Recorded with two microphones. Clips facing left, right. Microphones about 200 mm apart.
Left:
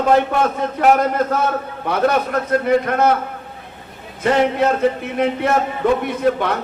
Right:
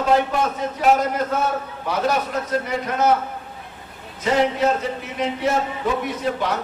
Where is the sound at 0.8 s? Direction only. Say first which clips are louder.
Left 3 dB; 55° left (ahead or behind).